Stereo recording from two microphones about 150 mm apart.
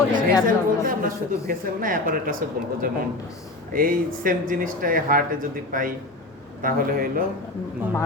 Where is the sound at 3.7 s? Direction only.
70° right (ahead or behind).